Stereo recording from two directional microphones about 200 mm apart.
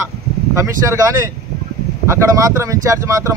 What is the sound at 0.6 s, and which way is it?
Speech, 15° right (ahead or behind).